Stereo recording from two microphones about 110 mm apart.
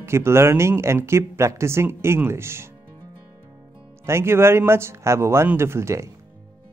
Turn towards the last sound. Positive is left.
turn(degrees=-25)  # may be behind; listen again after turning